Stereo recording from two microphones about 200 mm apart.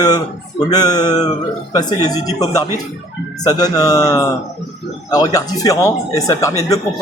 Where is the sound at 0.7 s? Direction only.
20° left (ahead or behind).